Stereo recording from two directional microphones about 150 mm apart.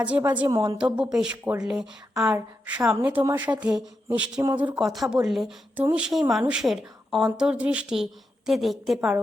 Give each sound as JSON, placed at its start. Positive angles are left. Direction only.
{"t": 0.0, "sound": "a woman's voice", "side_deg": -10}
{"t": 0.4, "sound": "a woman's voice", "side_deg": -25}
{"t": 0.8, "sound": "a woman's voice", "side_deg": -10}